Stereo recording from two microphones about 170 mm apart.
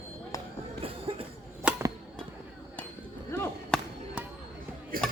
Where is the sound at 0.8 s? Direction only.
35° right (ahead or behind).